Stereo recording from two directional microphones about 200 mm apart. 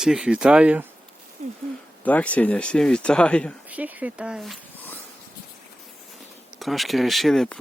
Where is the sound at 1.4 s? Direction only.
35° right (ahead or behind).